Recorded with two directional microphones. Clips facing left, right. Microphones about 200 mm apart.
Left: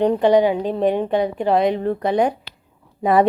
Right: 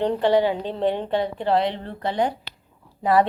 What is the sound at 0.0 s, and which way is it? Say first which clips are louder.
A woman's voice: left 4 dB; 15° left (ahead or behind).